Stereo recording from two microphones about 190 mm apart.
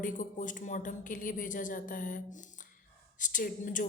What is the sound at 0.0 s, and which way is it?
Speech, 45° left (ahead or behind).